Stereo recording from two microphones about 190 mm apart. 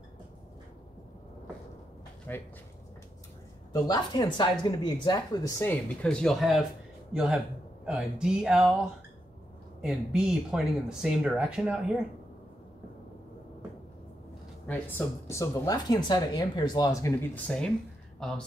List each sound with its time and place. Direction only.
2.3 s speech: 10° left (ahead or behind)
3.7 s speech: 20° left (ahead or behind); by 6.6 s centre (ahead or behind)
7.8 s speech: 5° right (ahead or behind)
9.8 s speech: 5° right (ahead or behind)
14.7 s speech: 10° left (ahead or behind)